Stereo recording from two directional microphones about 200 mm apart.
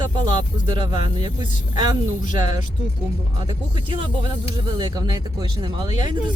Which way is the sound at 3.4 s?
25° right (ahead or behind).